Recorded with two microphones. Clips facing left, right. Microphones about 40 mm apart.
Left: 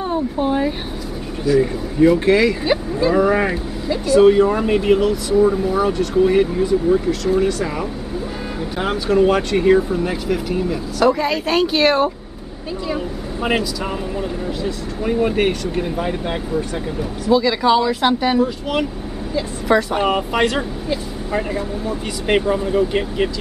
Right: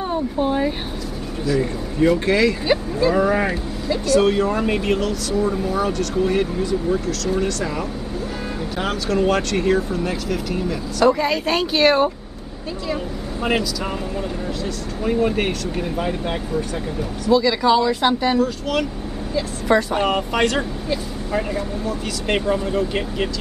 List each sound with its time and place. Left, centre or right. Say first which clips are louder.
0.1 s a sound: left 2 dB; centre
1.4 s speech: left 5 dB; centre
15.0 s speech: left 2 dB; centre
18.4 s speech: left 1 dB; centre
19.3 s speech: left 1 dB; centre